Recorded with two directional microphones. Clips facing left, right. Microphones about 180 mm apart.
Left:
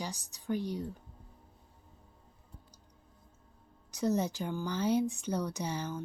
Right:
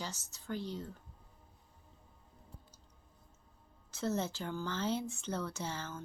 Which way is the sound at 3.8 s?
15° left (ahead or behind).